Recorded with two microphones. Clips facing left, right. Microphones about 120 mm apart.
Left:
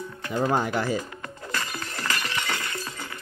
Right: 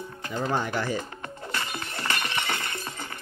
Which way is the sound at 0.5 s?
15° left (ahead or behind).